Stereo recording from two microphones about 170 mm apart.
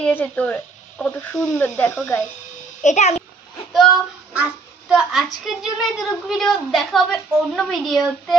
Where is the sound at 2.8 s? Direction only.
45° left (ahead or behind).